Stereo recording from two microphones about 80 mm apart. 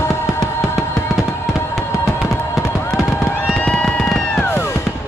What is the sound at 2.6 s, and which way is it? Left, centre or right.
Fireworks, left.